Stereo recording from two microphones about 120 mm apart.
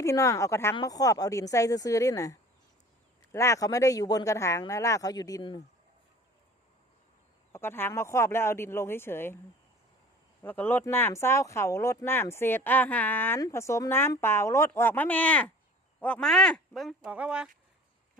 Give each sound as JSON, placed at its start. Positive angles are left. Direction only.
{"t": 0.0, "sound": "speech", "side_deg": 25}
{"t": 7.5, "sound": "speech", "side_deg": 20}
{"t": 10.4, "sound": "speech", "side_deg": 15}
{"t": 17.1, "sound": "speech", "side_deg": -10}